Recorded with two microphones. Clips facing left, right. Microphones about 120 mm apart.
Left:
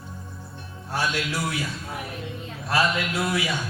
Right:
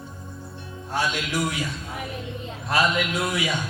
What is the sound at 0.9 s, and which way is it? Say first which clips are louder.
Speech: right 1 dB; 20° right (ahead or behind).